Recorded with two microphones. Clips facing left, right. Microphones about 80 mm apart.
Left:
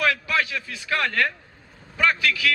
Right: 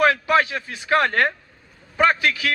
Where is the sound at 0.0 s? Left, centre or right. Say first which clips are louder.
Right 6 dB; right.